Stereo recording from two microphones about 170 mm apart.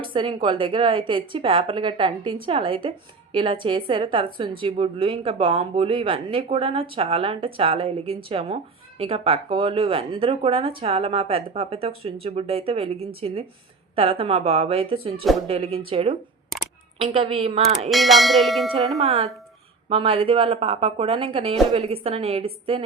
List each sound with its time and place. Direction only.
0.0 s speech: 30° right (ahead or behind)
17.8 s bell: centre (ahead or behind)
19.0 s speech: 35° right (ahead or behind)